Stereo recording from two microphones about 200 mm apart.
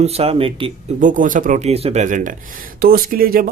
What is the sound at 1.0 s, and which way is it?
Speech, 40° right (ahead or behind).